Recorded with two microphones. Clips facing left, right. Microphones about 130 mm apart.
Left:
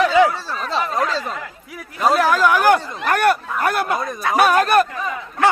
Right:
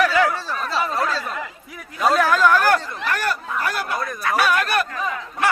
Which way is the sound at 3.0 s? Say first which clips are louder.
Left 7 dB; 55° left (ahead or behind).